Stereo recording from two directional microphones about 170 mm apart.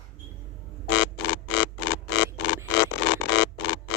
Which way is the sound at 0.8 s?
90° left.